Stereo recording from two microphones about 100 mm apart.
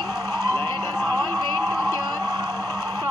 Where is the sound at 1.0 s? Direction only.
20° left (ahead or behind).